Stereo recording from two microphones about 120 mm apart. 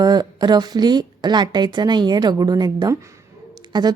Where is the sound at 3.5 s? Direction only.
35° right (ahead or behind).